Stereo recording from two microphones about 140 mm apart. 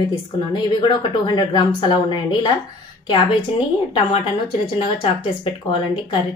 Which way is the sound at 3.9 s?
40° left (ahead or behind).